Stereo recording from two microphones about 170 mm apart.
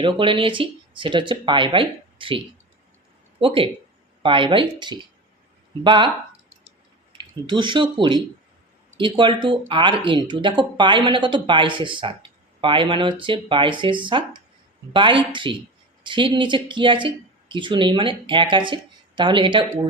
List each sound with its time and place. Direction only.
0.0 s speech: 30° right (ahead or behind)
3.4 s speech: 30° right (ahead or behind)
7.1 s speech: 25° right (ahead or behind)